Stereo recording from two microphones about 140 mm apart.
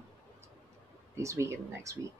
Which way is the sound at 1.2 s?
20° right (ahead or behind).